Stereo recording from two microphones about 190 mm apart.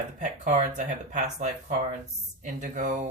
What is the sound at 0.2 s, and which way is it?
Speech, 40° right (ahead or behind).